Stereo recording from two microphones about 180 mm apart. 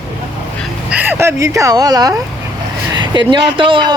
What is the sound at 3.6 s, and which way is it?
Speech, 30° right (ahead or behind).